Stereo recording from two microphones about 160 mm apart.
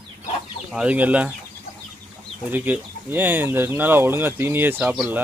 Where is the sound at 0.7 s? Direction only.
5° right (ahead or behind).